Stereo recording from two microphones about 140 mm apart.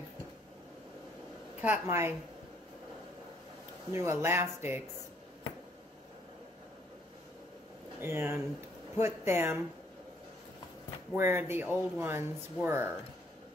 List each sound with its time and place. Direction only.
1.6 s speech: 15° right (ahead or behind)
3.9 s speech: 20° right (ahead or behind)
8.0 s speech: 15° right (ahead or behind)
11.1 s speech: 15° right (ahead or behind)